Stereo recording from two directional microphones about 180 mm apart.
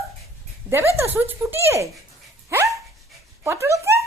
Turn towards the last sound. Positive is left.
turn(degrees=-15)  # may be behind; listen again after turning